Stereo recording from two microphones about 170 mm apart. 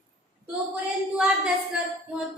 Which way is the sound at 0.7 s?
5° right (ahead or behind).